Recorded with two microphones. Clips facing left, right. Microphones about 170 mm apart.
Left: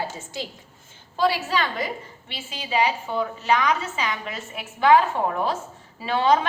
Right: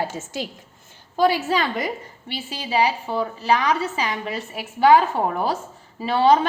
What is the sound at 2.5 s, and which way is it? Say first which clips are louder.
A woman's voice: right 2 dB; 35° right (ahead or behind).